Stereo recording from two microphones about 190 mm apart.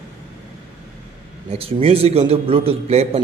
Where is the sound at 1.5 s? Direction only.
30° right (ahead or behind).